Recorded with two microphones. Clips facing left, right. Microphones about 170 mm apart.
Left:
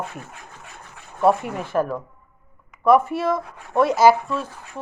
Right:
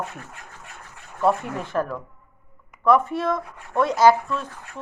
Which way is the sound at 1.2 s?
5° left (ahead or behind).